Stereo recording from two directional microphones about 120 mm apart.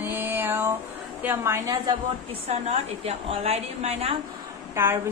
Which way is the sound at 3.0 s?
55° right (ahead or behind).